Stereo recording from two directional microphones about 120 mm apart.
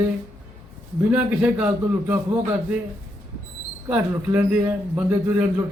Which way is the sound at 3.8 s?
15° right (ahead or behind).